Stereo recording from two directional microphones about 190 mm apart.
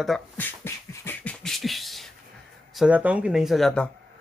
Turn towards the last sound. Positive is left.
turn(degrees=0)  # may be behind; listen again after turning